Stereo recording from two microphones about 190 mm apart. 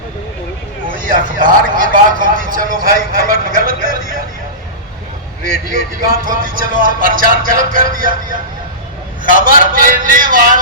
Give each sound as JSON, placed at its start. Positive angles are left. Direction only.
{"t": 0.9, "sound": "vehicle", "side_deg": -45}
{"t": 5.4, "sound": "speech", "side_deg": -45}
{"t": 9.2, "sound": "speech", "side_deg": -45}